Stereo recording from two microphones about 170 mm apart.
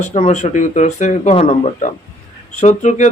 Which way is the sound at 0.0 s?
40° left (ahead or behind).